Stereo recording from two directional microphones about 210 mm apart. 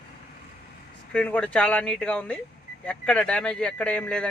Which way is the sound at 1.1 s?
5° left (ahead or behind).